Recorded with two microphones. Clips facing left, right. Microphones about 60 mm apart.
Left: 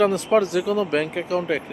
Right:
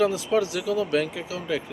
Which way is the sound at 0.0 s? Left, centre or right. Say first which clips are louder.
Left 4 dB; left.